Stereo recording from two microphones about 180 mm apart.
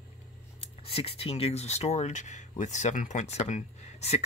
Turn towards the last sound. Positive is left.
turn(degrees=35)  # may be behind; listen again after turning